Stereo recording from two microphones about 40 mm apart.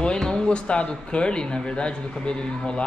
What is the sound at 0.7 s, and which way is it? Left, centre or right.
Speech, left.